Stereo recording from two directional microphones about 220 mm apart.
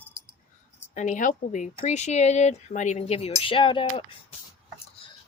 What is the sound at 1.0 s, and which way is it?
Speech, 35° left (ahead or behind).